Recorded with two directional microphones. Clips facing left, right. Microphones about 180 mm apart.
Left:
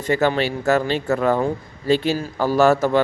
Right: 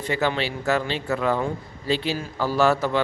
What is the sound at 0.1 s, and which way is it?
A man's voice, 45° left (ahead or behind).